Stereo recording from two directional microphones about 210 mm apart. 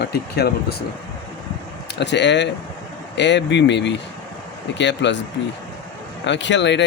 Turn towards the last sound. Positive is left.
turn(degrees=55)  # may be behind; listen again after turning